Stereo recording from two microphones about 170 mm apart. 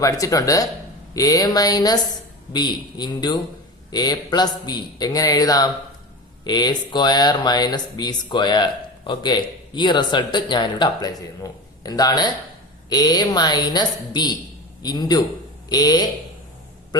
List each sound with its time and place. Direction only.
0.0 s speech: 20° left (ahead or behind)